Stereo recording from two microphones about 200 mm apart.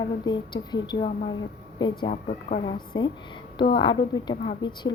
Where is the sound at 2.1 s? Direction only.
40° left (ahead or behind).